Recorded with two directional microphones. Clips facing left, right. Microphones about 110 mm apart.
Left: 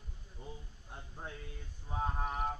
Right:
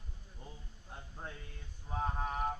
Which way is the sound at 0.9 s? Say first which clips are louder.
Even; 5° left (ahead or behind).